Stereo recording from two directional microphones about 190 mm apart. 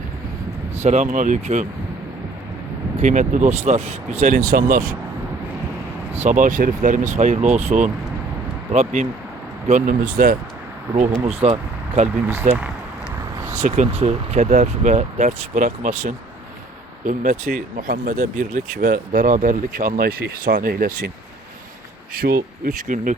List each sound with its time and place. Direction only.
0.8 s speech: 35° right (ahead or behind)
2.9 s speech: 40° right (ahead or behind)
6.2 s speech: 40° right (ahead or behind)
11.3 s speech: 30° right (ahead or behind)
12.3 s speech: 10° right (ahead or behind)
13.5 s speech: 40° right (ahead or behind)
22.1 s speech: 50° right (ahead or behind)